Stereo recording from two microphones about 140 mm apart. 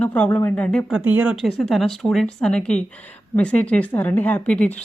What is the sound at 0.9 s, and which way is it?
Speech, 15° right (ahead or behind).